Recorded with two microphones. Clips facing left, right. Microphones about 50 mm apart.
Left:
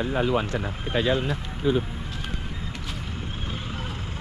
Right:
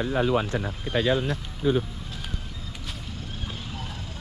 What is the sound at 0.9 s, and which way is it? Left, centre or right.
Speech, left.